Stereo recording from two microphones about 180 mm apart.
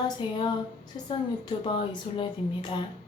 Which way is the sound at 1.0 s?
30° left (ahead or behind).